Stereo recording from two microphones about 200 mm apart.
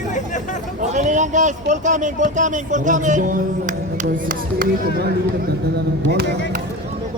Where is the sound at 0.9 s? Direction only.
40° right (ahead or behind).